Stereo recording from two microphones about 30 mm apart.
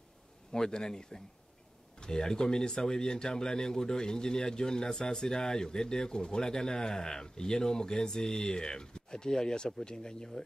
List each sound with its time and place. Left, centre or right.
0.5 s speech: left